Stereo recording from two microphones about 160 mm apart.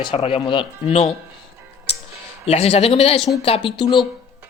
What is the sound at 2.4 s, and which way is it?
Speech, 40° left (ahead or behind).